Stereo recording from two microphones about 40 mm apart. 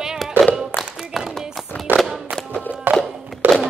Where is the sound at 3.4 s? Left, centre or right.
Right.